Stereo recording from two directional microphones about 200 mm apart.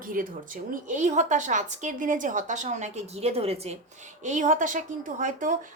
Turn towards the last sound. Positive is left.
turn(degrees=-40)  # may be behind; listen again after turning